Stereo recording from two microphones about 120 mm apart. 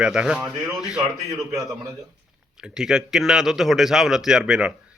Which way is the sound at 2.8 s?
5° right (ahead or behind).